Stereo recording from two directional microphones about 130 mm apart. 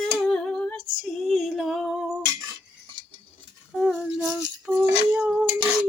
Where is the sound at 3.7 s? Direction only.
5° right (ahead or behind).